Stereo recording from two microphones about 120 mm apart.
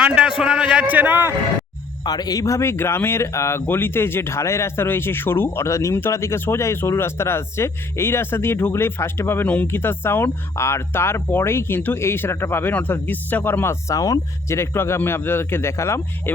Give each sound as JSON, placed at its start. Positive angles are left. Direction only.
{"t": 0.0, "sound": "a man's voice", "side_deg": -10}
{"t": 2.0, "sound": "speech", "side_deg": 35}